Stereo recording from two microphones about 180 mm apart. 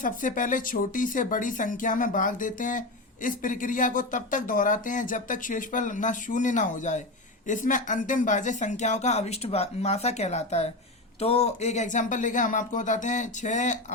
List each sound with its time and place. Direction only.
0.0 s speech: 45° left (ahead or behind)